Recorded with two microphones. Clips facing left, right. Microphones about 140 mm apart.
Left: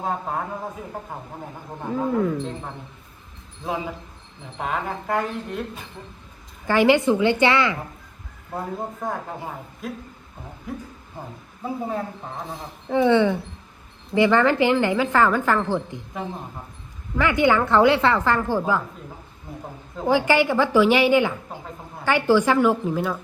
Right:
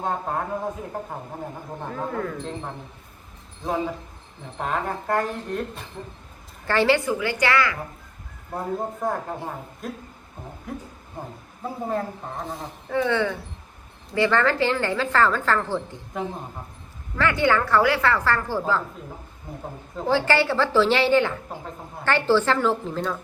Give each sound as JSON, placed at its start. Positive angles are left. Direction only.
{"t": 0.0, "sound": "a man's voice", "side_deg": 5}
{"t": 1.8, "sound": "a man's voice", "side_deg": 5}
{"t": 4.5, "sound": "a man's voice", "side_deg": 0}
{"t": 6.7, "sound": "a woman's voice", "side_deg": 15}
{"t": 8.5, "sound": "a man's voice", "side_deg": 0}
{"t": 12.9, "sound": "a woman's voice", "side_deg": 20}
{"t": 17.2, "sound": "a woman's voice", "side_deg": 15}
{"t": 20.1, "sound": "a woman's voice", "side_deg": 15}